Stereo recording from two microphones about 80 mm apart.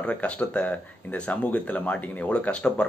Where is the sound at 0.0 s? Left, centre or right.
Centre.